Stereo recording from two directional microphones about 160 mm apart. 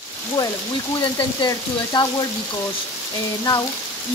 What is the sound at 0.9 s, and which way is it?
Speech, 25° left (ahead or behind).